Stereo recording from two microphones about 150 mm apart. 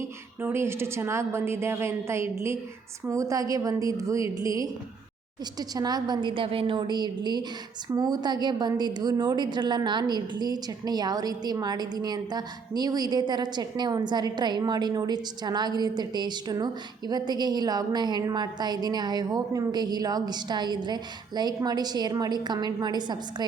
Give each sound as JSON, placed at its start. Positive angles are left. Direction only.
{"t": 0.0, "sound": "a woman's voice", "side_deg": -15}